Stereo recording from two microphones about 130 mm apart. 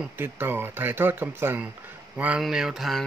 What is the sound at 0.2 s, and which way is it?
Speech, 15° right (ahead or behind).